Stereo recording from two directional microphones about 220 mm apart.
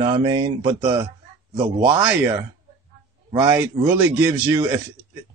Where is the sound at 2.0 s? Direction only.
10° right (ahead or behind).